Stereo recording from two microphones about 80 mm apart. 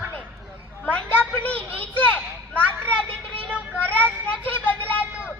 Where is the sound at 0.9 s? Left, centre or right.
Centre.